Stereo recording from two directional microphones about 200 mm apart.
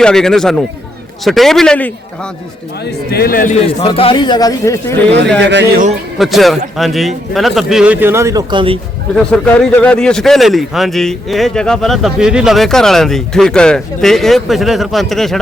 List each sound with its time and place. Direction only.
0.0 s a man's voice: 5° left (ahead or behind)
2.8 s a man's voice: 50° left (ahead or behind)
3.8 s speech: 30° left (ahead or behind)
5.4 s speech: 60° right (ahead or behind)
6.1 s a man's voice: centre (ahead or behind); by 8.8 s 25° right (ahead or behind)
9.1 s a man's voice: 5° left (ahead or behind)